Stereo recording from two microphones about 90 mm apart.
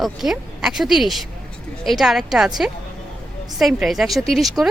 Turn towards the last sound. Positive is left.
turn(degrees=0)  # may be behind; listen again after turning